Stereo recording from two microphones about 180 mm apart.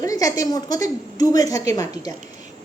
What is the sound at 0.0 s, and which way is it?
A woman's voice, 20° left (ahead or behind).